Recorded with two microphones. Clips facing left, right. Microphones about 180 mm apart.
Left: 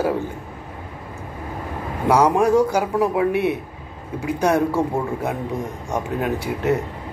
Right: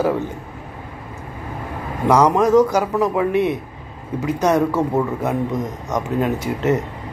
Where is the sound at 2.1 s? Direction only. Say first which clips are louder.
Right 2 dB; 10° left (ahead or behind).